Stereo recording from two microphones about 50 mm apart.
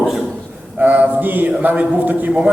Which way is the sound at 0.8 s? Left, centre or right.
Right.